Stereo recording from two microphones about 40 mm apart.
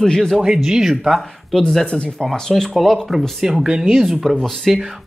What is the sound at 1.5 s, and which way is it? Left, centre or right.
Speech, centre.